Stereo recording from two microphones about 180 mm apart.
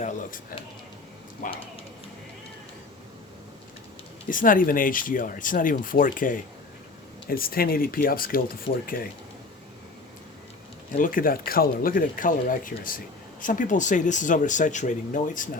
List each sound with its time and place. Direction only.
1.4 s speech: 50° left (ahead or behind)
4.3 s speech: 50° left (ahead or behind)
10.9 s speech: 50° left (ahead or behind)